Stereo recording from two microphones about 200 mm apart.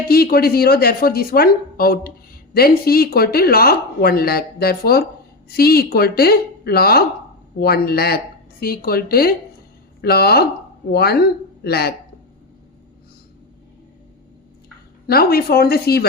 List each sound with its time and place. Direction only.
0.1 s speech: 50° left (ahead or behind)
15.0 s speech: 50° left (ahead or behind)